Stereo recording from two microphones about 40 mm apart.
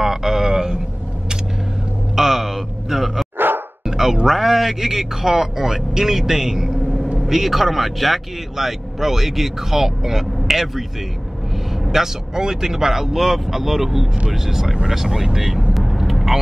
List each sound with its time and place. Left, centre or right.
0.0 s a sound: centre
2.1 s a sound: centre
3.3 s music: right
3.8 s speech: centre
11.8 s speech: centre
15.7 s vehicle: centre